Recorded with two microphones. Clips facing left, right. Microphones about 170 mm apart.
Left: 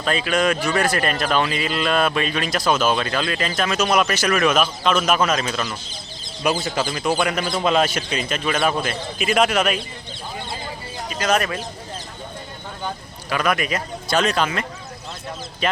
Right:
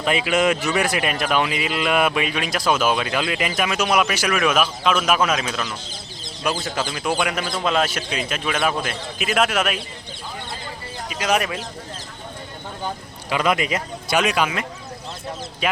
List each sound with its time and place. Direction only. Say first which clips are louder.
0.0 s a man's voice: right 1 dB; 15° right (ahead or behind)
11.1 s speech: left 1 dB; 10° right (ahead or behind)
13.3 s speech: right 1 dB; 20° right (ahead or behind)